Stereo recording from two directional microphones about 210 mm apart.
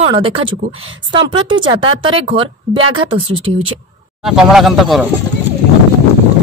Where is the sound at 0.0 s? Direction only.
25° right (ahead or behind).